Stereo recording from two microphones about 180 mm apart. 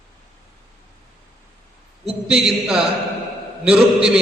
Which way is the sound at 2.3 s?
5° right (ahead or behind).